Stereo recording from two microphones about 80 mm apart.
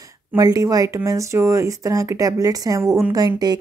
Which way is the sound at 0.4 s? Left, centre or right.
Right.